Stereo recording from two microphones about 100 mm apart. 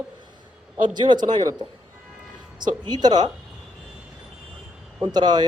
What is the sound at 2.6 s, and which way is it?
Speech, 45° right (ahead or behind).